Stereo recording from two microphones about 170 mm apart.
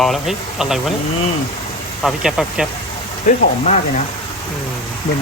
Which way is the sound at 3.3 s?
45° left (ahead or behind).